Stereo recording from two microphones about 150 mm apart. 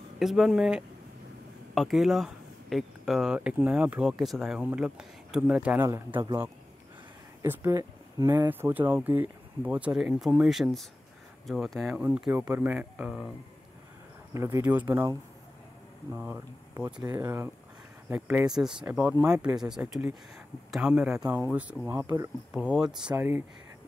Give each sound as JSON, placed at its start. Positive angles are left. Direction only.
{"t": 0.2, "sound": "speech", "side_deg": 0}
{"t": 7.4, "sound": "speech", "side_deg": -20}
{"t": 14.3, "sound": "speech", "side_deg": -20}
{"t": 22.5, "sound": "speech", "side_deg": -5}
{"t": 23.1, "sound": "speech", "side_deg": -15}